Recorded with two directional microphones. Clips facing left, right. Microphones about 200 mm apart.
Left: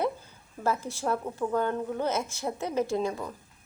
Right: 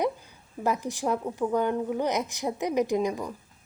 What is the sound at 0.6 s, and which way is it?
A woman's voice, 15° right (ahead or behind).